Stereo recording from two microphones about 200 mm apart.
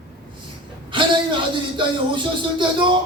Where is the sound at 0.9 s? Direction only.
25° right (ahead or behind).